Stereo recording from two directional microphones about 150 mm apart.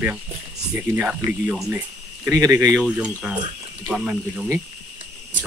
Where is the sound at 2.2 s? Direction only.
25° right (ahead or behind).